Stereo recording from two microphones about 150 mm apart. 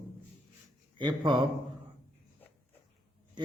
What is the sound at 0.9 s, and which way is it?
Speech, 30° right (ahead or behind).